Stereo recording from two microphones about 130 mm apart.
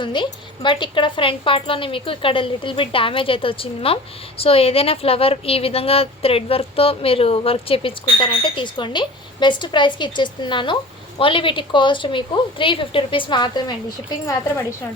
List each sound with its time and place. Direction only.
0.0 s a woman's voice: 40° left (ahead or behind)